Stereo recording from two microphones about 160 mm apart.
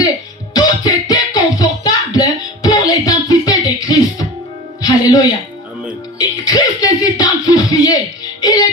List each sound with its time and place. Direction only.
0.5 s music: 25° left (ahead or behind)